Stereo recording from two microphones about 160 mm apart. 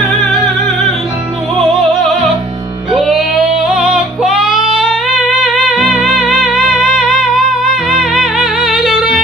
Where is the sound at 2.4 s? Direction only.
30° right (ahead or behind).